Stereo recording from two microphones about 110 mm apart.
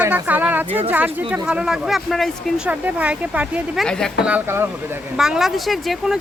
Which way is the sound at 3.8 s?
5° left (ahead or behind).